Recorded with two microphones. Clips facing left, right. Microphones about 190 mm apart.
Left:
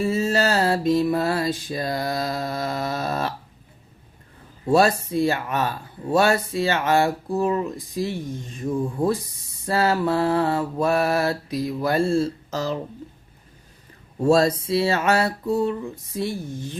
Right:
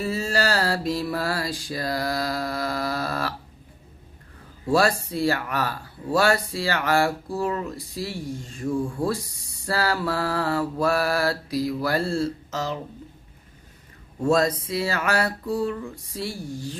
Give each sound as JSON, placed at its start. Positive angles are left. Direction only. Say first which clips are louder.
{"t": 0.0, "sound": "speech", "louder": "left 4 dB", "side_deg": 20}
{"t": 4.7, "sound": "speech", "louder": "left 3 dB", "side_deg": 20}
{"t": 12.5, "sound": "speech", "louder": "left 3 dB", "side_deg": 35}
{"t": 14.2, "sound": "speech", "louder": "left 3 dB", "side_deg": 30}